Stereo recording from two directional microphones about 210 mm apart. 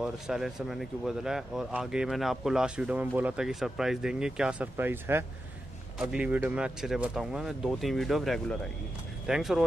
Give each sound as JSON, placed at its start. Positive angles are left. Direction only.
{"t": 0.0, "sound": "speech", "side_deg": -5}